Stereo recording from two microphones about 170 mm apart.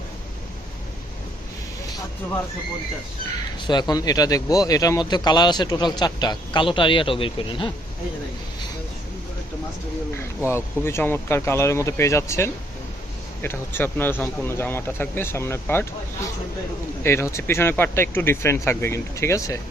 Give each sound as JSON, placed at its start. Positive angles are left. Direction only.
{"t": 3.7, "sound": "speech", "side_deg": 25}
{"t": 10.2, "sound": "speech", "side_deg": 15}
{"t": 17.0, "sound": "speech", "side_deg": 15}